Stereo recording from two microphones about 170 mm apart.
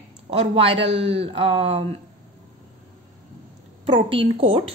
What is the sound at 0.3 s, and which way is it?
A woman's voice, 35° right (ahead or behind).